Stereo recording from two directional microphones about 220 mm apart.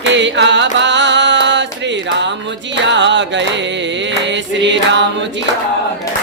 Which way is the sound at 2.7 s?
55° right (ahead or behind).